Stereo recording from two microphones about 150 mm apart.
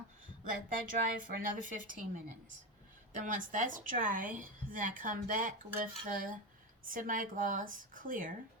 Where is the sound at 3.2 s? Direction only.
60° right (ahead or behind).